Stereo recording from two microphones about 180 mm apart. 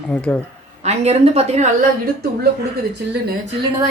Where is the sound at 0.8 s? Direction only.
35° right (ahead or behind).